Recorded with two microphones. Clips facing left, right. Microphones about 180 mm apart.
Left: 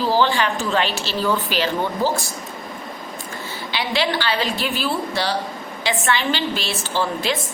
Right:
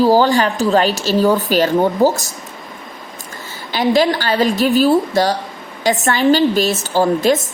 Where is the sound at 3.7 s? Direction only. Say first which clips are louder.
Right 9 dB; 45° right (ahead or behind).